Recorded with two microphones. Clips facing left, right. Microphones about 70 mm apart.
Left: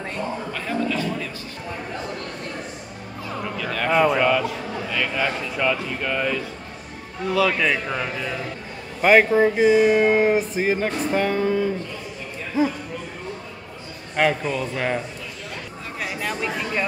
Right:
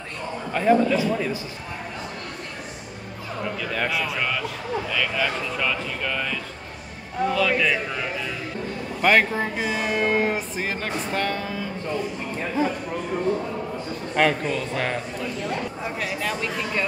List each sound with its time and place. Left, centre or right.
0.5 s a man's voice: centre
3.6 s a man's voice: centre
3.9 s speech: left
4.2 s speech: centre
12.6 s speech: centre
14.1 s speech: centre
16.0 s a sound: centre